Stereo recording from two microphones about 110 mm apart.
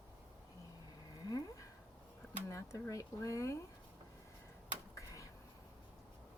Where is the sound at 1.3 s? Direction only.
35° left (ahead or behind).